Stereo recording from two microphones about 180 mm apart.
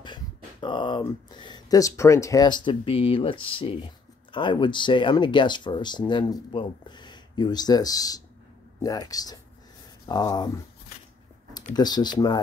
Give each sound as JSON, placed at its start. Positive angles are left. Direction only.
{"t": 0.0, "sound": "speech", "side_deg": 25}
{"t": 11.7, "sound": "speech", "side_deg": 20}